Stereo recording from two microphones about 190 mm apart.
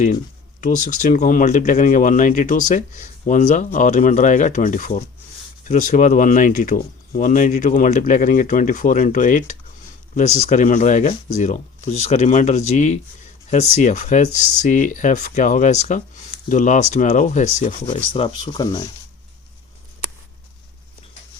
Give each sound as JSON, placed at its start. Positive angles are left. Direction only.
{"t": 0.6, "sound": "speech", "side_deg": 45}
{"t": 18.1, "sound": "speech", "side_deg": 25}